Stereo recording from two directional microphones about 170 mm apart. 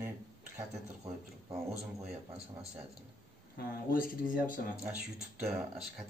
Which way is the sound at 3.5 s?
55° left (ahead or behind).